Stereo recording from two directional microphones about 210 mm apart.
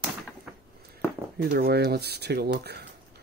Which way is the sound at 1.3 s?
50° right (ahead or behind).